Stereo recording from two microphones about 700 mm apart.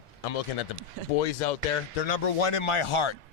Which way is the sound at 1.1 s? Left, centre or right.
Left.